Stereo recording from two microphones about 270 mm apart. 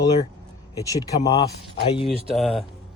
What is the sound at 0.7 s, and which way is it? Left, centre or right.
Speech, centre.